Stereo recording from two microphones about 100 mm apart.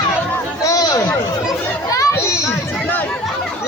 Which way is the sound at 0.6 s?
40° left (ahead or behind).